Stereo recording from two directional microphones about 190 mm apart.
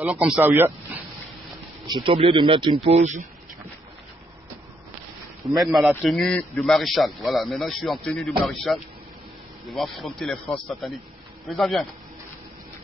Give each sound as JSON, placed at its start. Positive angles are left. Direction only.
{"t": 0.0, "sound": "speech", "side_deg": -5}
{"t": 1.9, "sound": "a man's voice", "side_deg": -25}
{"t": 5.6, "sound": "speech", "side_deg": 0}
{"t": 9.8, "sound": "speech", "side_deg": 0}